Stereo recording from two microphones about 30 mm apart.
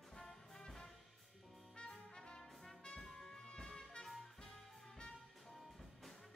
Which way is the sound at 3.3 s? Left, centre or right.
Left.